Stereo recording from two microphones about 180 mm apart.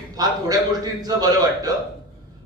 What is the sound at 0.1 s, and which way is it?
A man's voice, 20° right (ahead or behind).